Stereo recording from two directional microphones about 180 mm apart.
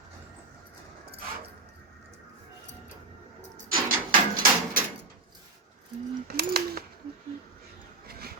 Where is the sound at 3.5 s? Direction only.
50° right (ahead or behind).